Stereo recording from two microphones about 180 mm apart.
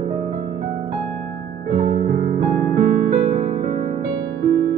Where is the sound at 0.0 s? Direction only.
30° right (ahead or behind).